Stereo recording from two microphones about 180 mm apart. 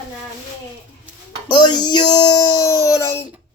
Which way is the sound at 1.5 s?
25° left (ahead or behind).